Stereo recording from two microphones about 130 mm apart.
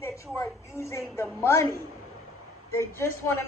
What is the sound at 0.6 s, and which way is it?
A woman's voice, 20° left (ahead or behind).